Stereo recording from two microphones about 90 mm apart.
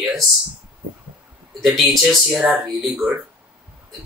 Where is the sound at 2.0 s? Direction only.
5° right (ahead or behind).